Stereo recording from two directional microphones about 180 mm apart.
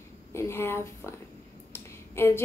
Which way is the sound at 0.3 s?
15° left (ahead or behind).